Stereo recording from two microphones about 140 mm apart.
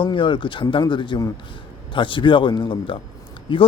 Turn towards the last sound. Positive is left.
turn(degrees=35)  # may be behind; listen again after turning